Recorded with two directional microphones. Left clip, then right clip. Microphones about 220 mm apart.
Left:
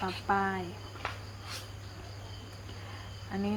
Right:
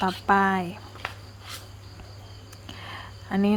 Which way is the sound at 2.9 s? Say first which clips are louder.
Right 10 dB; 55° right (ahead or behind).